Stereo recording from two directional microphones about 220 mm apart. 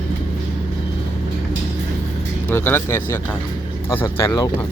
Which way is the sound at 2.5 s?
10° left (ahead or behind).